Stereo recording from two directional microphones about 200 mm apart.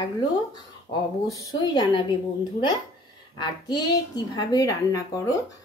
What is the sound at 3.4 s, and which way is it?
A woman's voice, 20° left (ahead or behind).